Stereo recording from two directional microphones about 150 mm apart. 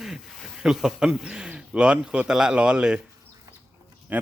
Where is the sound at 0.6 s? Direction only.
5° right (ahead or behind).